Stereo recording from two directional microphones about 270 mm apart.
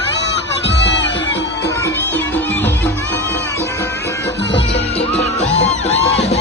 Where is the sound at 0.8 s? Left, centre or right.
Left.